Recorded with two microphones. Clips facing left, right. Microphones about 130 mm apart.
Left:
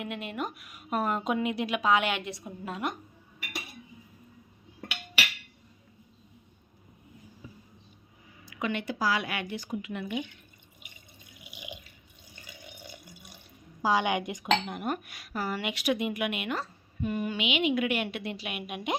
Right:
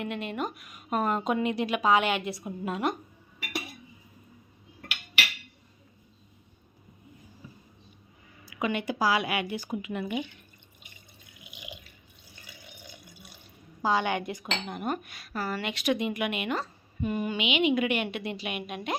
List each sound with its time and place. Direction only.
0.0 s speech: 5° left (ahead or behind)
8.6 s a woman's voice: 10° right (ahead or behind)
13.8 s speech: 15° left (ahead or behind)